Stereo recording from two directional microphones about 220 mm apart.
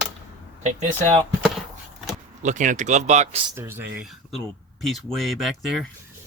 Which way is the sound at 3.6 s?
10° right (ahead or behind).